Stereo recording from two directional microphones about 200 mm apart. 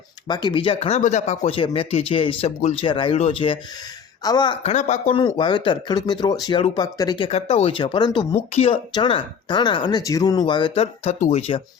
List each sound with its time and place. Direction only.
0.3 s speech: 20° left (ahead or behind)
7.3 s speech: 30° left (ahead or behind)